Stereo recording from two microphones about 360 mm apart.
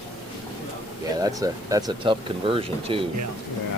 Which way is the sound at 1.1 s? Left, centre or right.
Centre.